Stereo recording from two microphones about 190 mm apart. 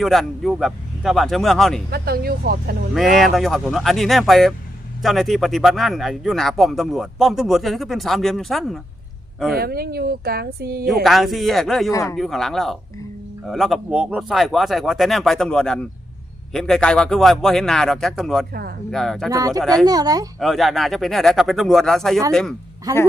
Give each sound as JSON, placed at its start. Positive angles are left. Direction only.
{"t": 0.0, "sound": "speech", "side_deg": 0}
{"t": 1.9, "sound": "speech", "side_deg": -55}
{"t": 2.9, "sound": "speech", "side_deg": 0}
{"t": 9.6, "sound": "speech", "side_deg": -55}
{"t": 11.0, "sound": "speech", "side_deg": 0}
{"t": 11.9, "sound": "speech", "side_deg": 15}
{"t": 12.1, "sound": "speech", "side_deg": 0}
{"t": 19.3, "sound": "speech", "side_deg": -20}
{"t": 20.4, "sound": "speech", "side_deg": 0}